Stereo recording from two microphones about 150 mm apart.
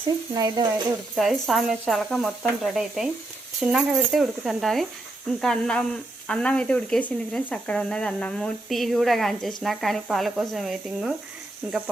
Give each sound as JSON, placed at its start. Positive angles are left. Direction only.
{"t": 0.3, "sound": "speech", "side_deg": -25}
{"t": 1.1, "sound": "speech", "side_deg": 0}